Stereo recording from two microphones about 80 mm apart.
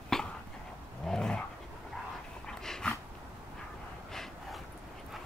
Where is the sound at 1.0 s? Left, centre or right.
Centre.